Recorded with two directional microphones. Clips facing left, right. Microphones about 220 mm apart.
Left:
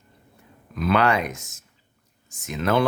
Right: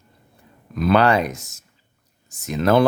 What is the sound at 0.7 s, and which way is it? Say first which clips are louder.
Speech: right 4 dB; 35° right (ahead or behind).